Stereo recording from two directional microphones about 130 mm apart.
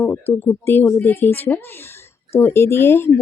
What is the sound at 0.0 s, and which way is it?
A woman's voice, 15° left (ahead or behind).